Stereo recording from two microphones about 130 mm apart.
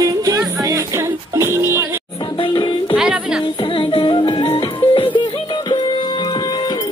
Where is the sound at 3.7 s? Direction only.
40° left (ahead or behind).